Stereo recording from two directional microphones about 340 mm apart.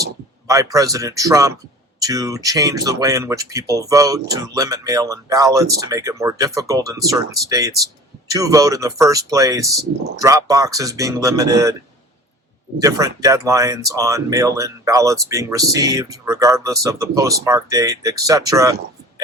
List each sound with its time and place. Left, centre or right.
0.4 s speech: centre
8.3 s speech: centre
12.8 s speech: centre